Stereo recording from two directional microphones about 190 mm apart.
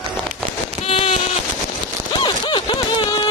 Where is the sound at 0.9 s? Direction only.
30° left (ahead or behind).